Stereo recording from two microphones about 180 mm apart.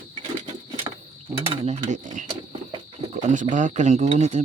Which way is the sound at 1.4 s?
35° right (ahead or behind).